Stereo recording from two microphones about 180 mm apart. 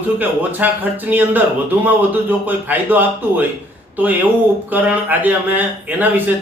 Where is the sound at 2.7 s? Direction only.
10° right (ahead or behind).